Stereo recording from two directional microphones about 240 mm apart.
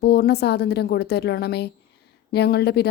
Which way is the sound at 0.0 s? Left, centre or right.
Left.